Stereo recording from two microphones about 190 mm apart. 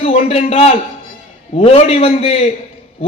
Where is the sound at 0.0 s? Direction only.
35° left (ahead or behind).